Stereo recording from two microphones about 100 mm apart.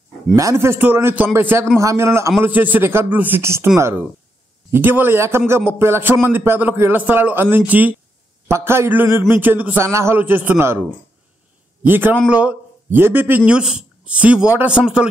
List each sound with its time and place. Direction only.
0.4 s a man's voice: 30° right (ahead or behind)
8.5 s a man's voice: 25° right (ahead or behind)
11.8 s a man's voice: 20° right (ahead or behind)
13.5 s speech: 10° right (ahead or behind)